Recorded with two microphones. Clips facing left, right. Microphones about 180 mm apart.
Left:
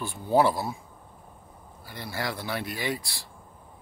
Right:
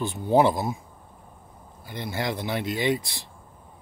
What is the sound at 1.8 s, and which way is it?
Speech, 20° right (ahead or behind).